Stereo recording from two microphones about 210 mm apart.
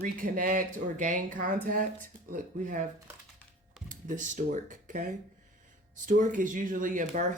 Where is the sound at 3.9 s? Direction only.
35° right (ahead or behind).